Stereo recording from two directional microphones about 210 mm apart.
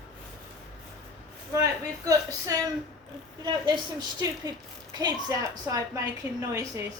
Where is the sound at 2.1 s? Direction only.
15° right (ahead or behind).